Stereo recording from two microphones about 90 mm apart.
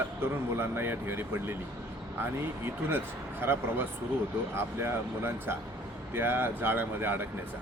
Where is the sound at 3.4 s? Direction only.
25° right (ahead or behind).